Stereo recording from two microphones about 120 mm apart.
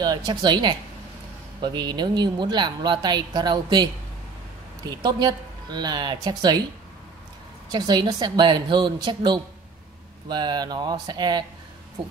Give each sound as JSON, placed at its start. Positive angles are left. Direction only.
{"t": 0.0, "sound": "a woman's voice", "side_deg": -35}
{"t": 7.7, "sound": "a woman's voice", "side_deg": -35}